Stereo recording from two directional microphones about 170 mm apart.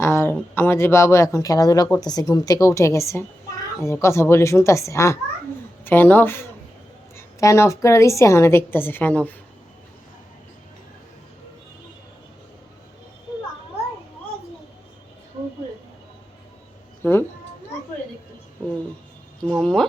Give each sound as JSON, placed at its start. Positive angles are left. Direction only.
{"t": 0.0, "sound": "speech", "side_deg": 15}
{"t": 17.0, "sound": "speech", "side_deg": 15}
{"t": 19.5, "sound": "speech", "side_deg": 0}